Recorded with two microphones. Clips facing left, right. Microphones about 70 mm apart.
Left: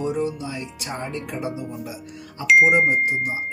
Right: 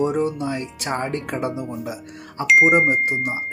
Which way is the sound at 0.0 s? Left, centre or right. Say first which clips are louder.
Right 4 dB; right.